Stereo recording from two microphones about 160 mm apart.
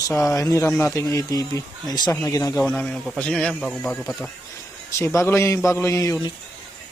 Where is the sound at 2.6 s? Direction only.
5° left (ahead or behind).